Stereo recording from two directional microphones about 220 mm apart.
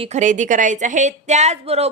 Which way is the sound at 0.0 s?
30° right (ahead or behind).